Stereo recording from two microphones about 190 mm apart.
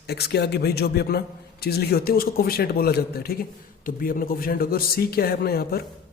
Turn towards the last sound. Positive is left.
turn(degrees=55)  # may be behind; listen again after turning